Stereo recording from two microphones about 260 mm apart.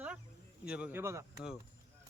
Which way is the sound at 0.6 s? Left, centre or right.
Centre.